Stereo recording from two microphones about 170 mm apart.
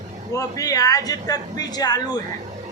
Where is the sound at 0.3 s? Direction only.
20° left (ahead or behind).